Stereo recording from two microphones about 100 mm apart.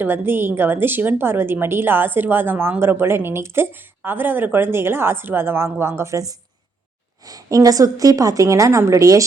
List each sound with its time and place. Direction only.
0.0 s a woman's voice: 20° right (ahead or behind)